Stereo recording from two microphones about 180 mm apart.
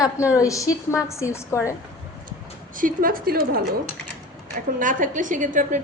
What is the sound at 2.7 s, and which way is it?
Speech, 50° right (ahead or behind).